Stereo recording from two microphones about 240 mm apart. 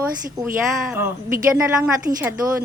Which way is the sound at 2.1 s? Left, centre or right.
Right.